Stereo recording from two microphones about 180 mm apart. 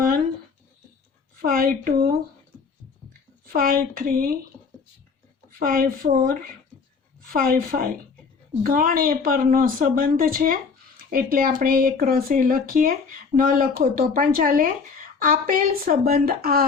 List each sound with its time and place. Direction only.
1.4 s a woman's voice: 50° right (ahead or behind)
3.4 s a woman's voice: 50° right (ahead or behind)
5.5 s a woman's voice: 50° right (ahead or behind)